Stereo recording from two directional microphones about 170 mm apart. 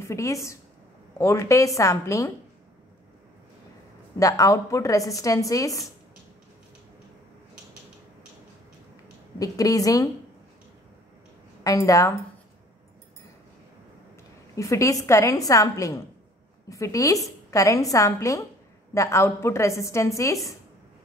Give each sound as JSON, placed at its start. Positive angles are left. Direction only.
{"t": 0.0, "sound": "a woman's voice", "side_deg": 15}
{"t": 4.2, "sound": "a woman's voice", "side_deg": 20}
{"t": 9.4, "sound": "a woman's voice", "side_deg": 20}
{"t": 11.6, "sound": "a woman's voice", "side_deg": 20}
{"t": 14.5, "sound": "a woman's voice", "side_deg": 20}